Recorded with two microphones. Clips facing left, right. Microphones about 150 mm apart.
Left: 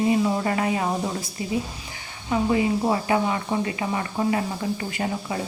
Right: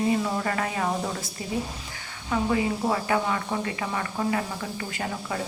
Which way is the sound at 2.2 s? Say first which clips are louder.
Left 3 dB; 25° left (ahead or behind).